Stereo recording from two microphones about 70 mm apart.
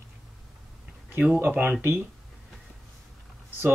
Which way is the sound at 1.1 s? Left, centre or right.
Right.